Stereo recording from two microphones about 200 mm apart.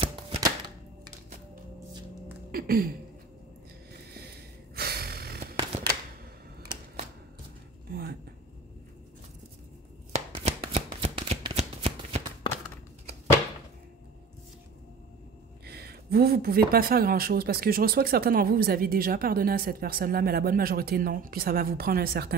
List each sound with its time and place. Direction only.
0.0 s typewriter: 30° right (ahead or behind)
2.5 s speech: 45° right (ahead or behind)
4.7 s gasp: 50° right (ahead or behind)
7.9 s a sound: 50° right (ahead or behind)
10.1 s shuffling cards: 30° right (ahead or behind)
15.6 s speech: 50° right (ahead or behind)